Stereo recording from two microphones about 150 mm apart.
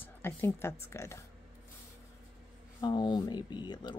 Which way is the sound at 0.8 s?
20° left (ahead or behind).